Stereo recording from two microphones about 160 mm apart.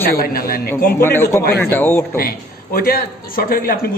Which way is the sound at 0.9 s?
15° left (ahead or behind).